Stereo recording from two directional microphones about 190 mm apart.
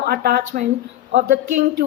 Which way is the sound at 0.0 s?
55° right (ahead or behind).